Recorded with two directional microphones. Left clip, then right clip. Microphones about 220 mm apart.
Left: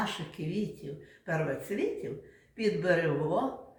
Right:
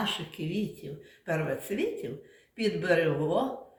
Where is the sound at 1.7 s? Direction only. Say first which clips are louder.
Right 1 dB; 50° right (ahead or behind).